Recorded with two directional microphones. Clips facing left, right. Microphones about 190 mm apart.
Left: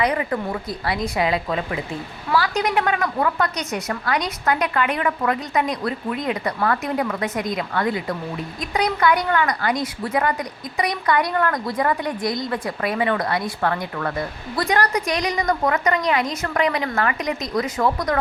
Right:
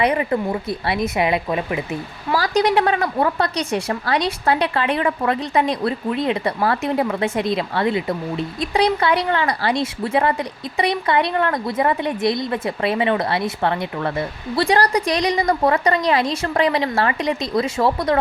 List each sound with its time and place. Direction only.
0.0 s a woman's voice: 25° right (ahead or behind)
2.3 s a woman's voice: 35° right (ahead or behind)